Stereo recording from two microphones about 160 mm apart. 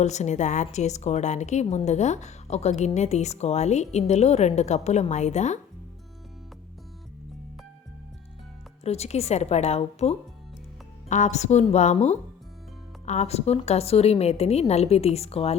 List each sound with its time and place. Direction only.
0.0 s a woman's voice: 45° left (ahead or behind)
8.8 s a woman's voice: 40° left (ahead or behind)